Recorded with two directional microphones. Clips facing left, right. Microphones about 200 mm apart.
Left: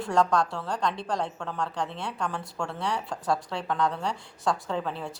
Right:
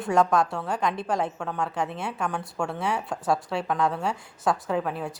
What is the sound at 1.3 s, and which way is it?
A woman's voice, 5° right (ahead or behind).